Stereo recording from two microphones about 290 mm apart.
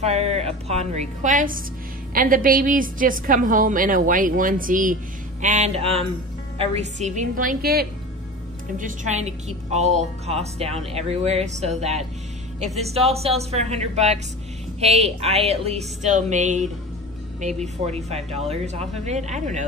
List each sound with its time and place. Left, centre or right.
0.0 s a woman's voice: right